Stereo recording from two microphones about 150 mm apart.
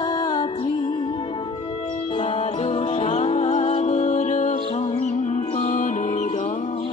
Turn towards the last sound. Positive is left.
turn(degrees=50)  # may be behind; listen again after turning